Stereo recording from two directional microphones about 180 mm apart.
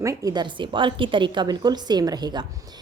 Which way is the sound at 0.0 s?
20° right (ahead or behind).